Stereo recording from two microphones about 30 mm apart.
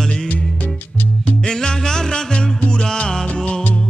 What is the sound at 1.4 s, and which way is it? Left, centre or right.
Music, left.